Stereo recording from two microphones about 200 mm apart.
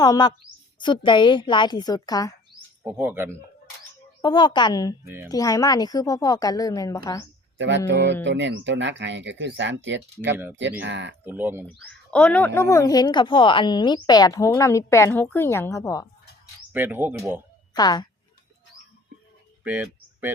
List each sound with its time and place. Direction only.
0.0 s a woman's voice: 20° left (ahead or behind)
2.8 s speech: 10° right (ahead or behind)
4.2 s a woman's voice: 25° left (ahead or behind)
5.0 s speech: 10° right (ahead or behind)
5.3 s a woman's voice: 15° left (ahead or behind)
7.9 s speech: 65° right (ahead or behind)
10.3 s speech: 10° right (ahead or behind)
10.6 s speech: 65° right (ahead or behind)
11.3 s speech: 10° right (ahead or behind)
11.6 s a woman's voice: 5° left (ahead or behind)
16.7 s speech: 10° right (ahead or behind)
17.7 s a woman's voice: 20° left (ahead or behind)
19.6 s a sound: 10° right (ahead or behind)